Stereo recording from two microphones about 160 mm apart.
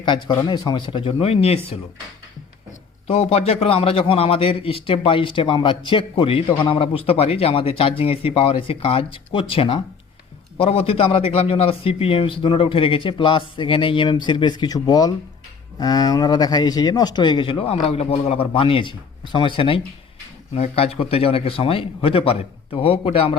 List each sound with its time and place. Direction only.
0.0 s speech: 30° left (ahead or behind)
3.1 s a man's voice: 35° left (ahead or behind)